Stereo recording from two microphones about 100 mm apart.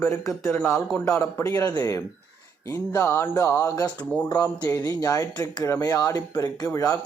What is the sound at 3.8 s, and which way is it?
Speech, 15° left (ahead or behind).